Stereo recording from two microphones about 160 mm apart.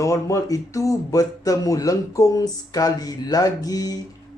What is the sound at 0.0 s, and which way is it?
Speech, 20° left (ahead or behind).